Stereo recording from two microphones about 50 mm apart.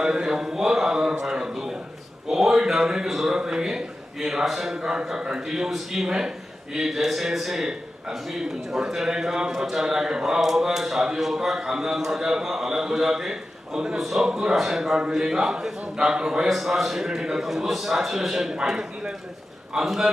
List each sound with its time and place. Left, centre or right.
0.0 s a man's voice: centre
2.3 s a sound: centre
3.3 s a man's voice: centre
4.8 s a man's voice: centre
16.5 s a man's voice: centre